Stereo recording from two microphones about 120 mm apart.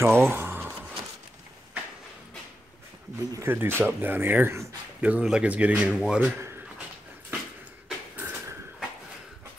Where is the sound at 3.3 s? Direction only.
20° right (ahead or behind); by 6.2 s centre (ahead or behind).